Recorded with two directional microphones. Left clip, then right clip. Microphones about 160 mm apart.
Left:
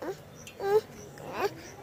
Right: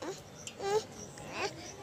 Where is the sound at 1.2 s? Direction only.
55° left (ahead or behind).